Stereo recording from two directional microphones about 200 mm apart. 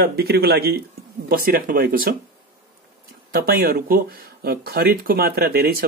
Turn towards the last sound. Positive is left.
turn(degrees=-50)  # may be behind; listen again after turning